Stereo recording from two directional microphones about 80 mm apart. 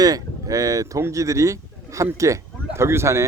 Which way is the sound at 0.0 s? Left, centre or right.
Right.